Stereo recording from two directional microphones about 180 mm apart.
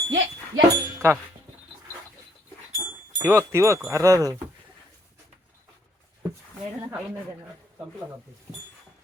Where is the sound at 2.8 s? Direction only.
15° right (ahead or behind).